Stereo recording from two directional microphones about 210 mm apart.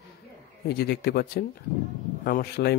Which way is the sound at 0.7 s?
50° left (ahead or behind).